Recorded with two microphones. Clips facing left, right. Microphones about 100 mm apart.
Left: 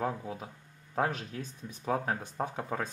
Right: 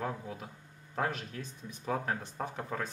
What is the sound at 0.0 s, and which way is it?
Speech, 20° left (ahead or behind).